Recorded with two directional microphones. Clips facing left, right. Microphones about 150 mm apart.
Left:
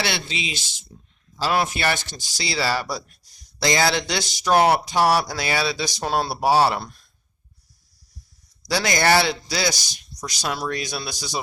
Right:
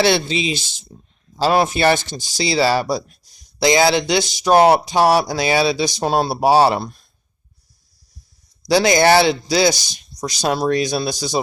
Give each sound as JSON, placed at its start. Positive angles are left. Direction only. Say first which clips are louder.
{"t": 0.0, "sound": "speech", "louder": "right 10 dB", "side_deg": -30}
{"t": 8.6, "sound": "speech", "louder": "right 7 dB", "side_deg": -20}